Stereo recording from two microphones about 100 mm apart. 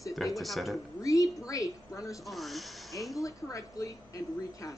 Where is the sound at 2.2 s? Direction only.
Centre (ahead or behind).